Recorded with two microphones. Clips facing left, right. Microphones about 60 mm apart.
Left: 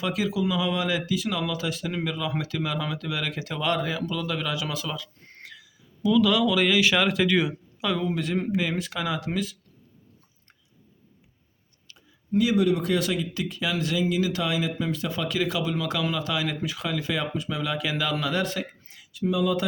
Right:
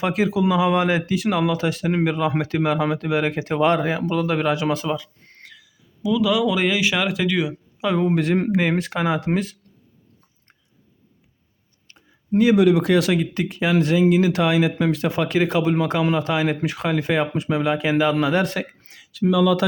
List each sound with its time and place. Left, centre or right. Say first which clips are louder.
0.0 s speech: right 6 dB; right
5.2 s a sound: even; centre
6.0 s speech: right 1 dB; centre
7.8 s speech: right 6 dB; right
8.0 s speech: right 7 dB; right
11.9 s a sound: right 6 dB; right
12.5 s speech: right 7 dB; right
16.6 s speech: right 7 dB; right
17.7 s speech: right 8 dB; right
18.5 s speech: right 5 dB; right